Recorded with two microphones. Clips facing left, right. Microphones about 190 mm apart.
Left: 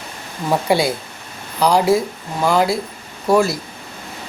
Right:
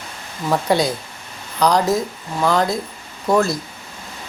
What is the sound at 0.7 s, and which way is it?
A woman's voice, 10° left (ahead or behind).